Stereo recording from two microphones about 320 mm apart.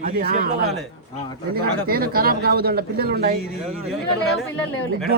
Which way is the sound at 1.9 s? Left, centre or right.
Right.